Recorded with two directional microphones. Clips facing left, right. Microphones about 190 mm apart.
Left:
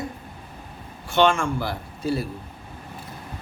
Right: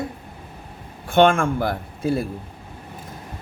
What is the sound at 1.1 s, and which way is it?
A man's voice, 55° right (ahead or behind).